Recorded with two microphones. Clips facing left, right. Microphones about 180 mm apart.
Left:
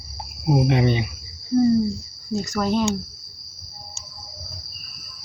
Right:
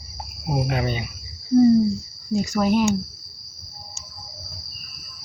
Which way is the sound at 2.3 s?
10° right (ahead or behind).